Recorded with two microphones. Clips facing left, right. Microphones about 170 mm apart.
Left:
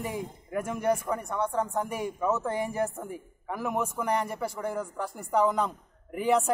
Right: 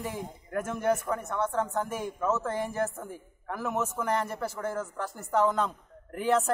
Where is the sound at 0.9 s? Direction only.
10° left (ahead or behind).